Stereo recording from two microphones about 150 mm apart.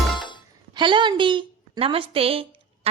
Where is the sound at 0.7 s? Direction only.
30° right (ahead or behind).